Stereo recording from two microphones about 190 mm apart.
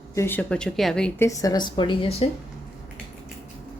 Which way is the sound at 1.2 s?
20° left (ahead or behind).